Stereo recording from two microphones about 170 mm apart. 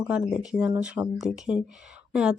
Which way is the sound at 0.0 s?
5° right (ahead or behind).